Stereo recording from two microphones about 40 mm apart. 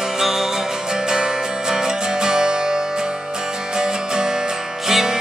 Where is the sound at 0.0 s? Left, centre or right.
Centre.